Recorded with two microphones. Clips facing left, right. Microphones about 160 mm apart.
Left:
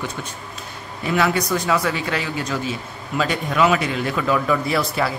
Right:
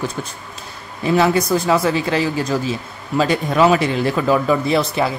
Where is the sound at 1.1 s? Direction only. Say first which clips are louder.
Right 5 dB; 30° right (ahead or behind).